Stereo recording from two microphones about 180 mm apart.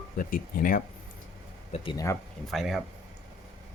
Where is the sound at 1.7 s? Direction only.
30° left (ahead or behind).